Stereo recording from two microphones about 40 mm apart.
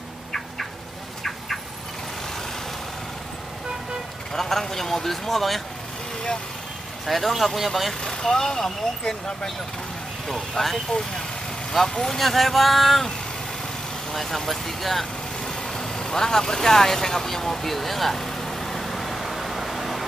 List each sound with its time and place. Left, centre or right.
4.3 s speech: centre
7.1 s speech: centre
8.0 s speech: centre
10.6 s speech: centre
14.1 s speech: centre
15.4 s vehicle: centre